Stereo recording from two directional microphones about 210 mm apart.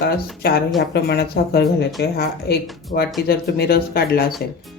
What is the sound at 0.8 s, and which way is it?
Speech, 50° left (ahead or behind).